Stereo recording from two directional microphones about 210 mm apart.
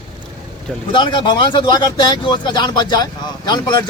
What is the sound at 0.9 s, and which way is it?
Speech, 20° left (ahead or behind).